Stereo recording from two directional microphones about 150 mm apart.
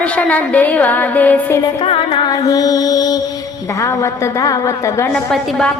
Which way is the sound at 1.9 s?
35° left (ahead or behind).